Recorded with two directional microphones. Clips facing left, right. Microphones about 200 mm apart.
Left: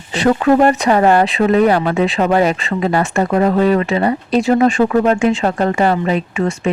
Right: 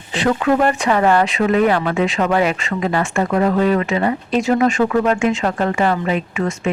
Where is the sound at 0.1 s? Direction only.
40° left (ahead or behind).